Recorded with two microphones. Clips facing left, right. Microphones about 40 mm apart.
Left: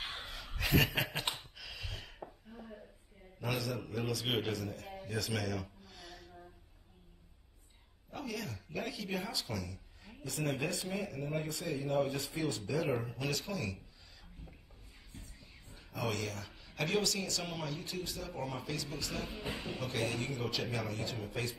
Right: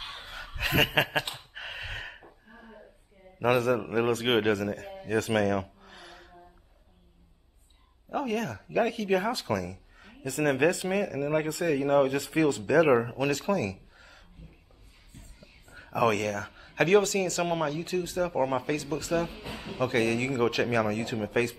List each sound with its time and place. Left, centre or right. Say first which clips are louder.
0.2 s chuckle: right 6 dB; right
1.5 s a sound: right 9 dB; right
3.3 s speech: right 13 dB; right
5.0 s music: right 12 dB; right
8.1 s speech: right 11 dB; right
15.4 s whispering: right 7 dB; right
16.4 s speech: right 12 dB; right